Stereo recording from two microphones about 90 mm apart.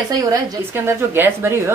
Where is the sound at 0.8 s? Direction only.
25° right (ahead or behind).